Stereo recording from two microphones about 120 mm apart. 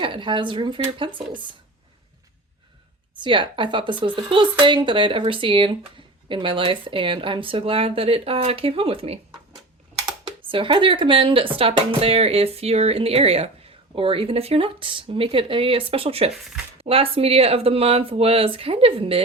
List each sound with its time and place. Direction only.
0.0 s speech: 45° right (ahead or behind)
3.2 s speech: 45° right (ahead or behind)
10.2 s speech: 45° right (ahead or behind)